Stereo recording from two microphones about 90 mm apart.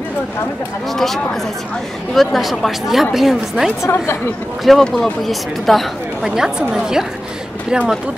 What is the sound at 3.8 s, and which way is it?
Speech, 30° left (ahead or behind).